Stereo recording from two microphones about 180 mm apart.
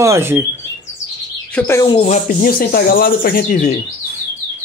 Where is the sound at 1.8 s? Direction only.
25° left (ahead or behind).